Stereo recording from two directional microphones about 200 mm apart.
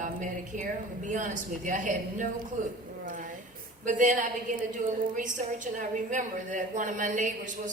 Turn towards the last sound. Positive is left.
turn(degrees=-40)  # may be behind; listen again after turning